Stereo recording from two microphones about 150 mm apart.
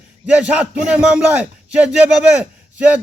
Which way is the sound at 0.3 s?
5° right (ahead or behind).